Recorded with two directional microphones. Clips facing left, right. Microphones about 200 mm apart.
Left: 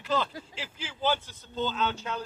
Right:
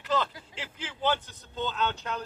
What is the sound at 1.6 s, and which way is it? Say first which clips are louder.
Speech: left 1 dB; 5° left (ahead or behind).